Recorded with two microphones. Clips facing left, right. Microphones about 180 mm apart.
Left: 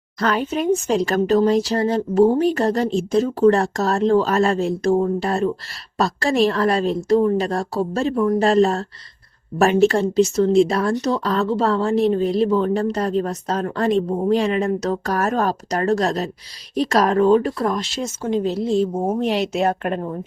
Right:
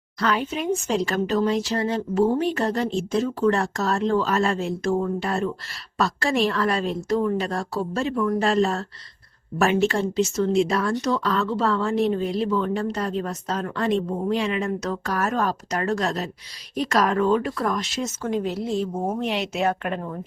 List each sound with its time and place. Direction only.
0.2 s speech: 45° left (ahead or behind)